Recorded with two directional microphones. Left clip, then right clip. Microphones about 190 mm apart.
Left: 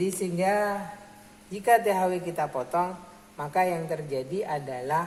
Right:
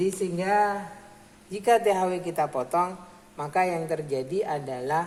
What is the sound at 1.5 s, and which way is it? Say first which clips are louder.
A woman's voice: even; 40° right (ahead or behind).